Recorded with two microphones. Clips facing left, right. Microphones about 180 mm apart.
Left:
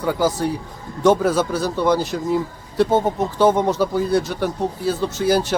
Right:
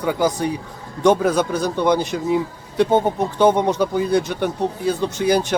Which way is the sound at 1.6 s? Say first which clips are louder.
Right 1 dB; 20° right (ahead or behind).